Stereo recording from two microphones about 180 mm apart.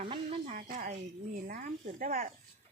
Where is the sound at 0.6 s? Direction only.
45° right (ahead or behind).